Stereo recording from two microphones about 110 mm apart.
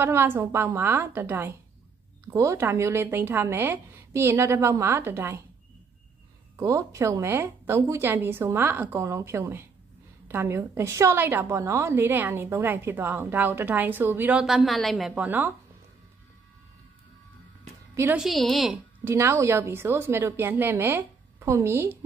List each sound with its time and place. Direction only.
0.0 s a woman's voice: 20° right (ahead or behind)
6.5 s a woman's voice: 30° right (ahead or behind)
14.4 s a woman's voice: centre (ahead or behind)
15.2 s a woman's voice: 15° right (ahead or behind)
18.1 s a woman's voice: centre (ahead or behind)
19.0 s a woman's voice: 25° right (ahead or behind)